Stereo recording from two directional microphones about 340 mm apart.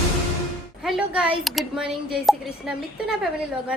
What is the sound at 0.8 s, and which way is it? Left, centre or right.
Speech, centre.